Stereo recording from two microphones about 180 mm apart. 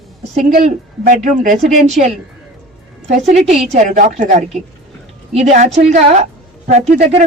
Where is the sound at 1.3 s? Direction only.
45° right (ahead or behind).